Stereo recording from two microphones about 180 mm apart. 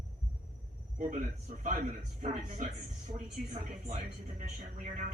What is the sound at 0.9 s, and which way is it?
A woman's voice, 45° right (ahead or behind).